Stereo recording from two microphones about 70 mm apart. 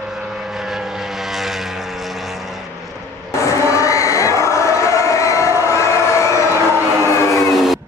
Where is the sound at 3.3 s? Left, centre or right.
Left.